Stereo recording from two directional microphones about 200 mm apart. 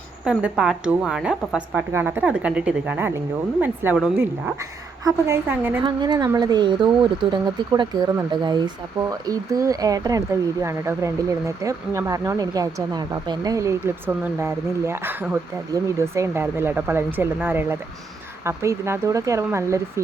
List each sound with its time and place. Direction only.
0.3 s a woman's voice: 5° right (ahead or behind)